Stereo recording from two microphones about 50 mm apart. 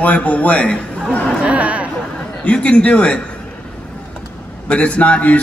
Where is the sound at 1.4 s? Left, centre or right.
Right.